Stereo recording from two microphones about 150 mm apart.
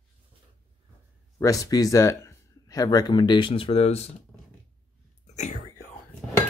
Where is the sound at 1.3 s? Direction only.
20° left (ahead or behind); by 4.1 s 45° left (ahead or behind).